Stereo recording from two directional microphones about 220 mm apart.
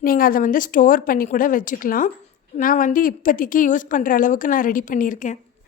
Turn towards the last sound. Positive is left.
turn(degrees=35)  # may be behind; listen again after turning